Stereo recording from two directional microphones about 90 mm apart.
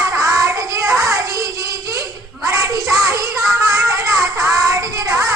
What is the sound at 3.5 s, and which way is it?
Music, 35° right (ahead or behind).